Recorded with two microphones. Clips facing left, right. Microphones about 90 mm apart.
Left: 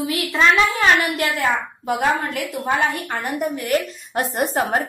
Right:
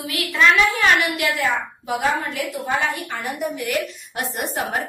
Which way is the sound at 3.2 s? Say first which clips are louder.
Left 4 dB; 40° left (ahead or behind).